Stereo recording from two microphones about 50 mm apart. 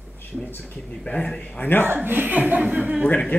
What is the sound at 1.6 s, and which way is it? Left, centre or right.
Speech, left.